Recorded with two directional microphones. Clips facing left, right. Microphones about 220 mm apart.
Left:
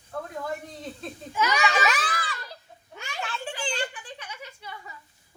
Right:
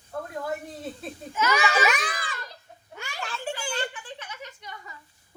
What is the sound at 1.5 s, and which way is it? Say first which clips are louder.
Speech: right 3 dB; 15° right (ahead or behind).